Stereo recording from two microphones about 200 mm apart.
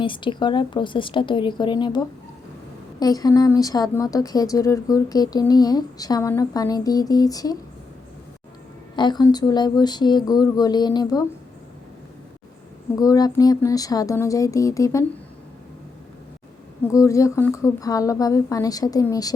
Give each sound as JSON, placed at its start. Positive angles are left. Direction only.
{"t": 0.0, "sound": "speech", "side_deg": 25}
{"t": 9.0, "sound": "speech", "side_deg": 20}
{"t": 13.0, "sound": "a woman's voice", "side_deg": 20}
{"t": 16.8, "sound": "a woman's voice", "side_deg": 15}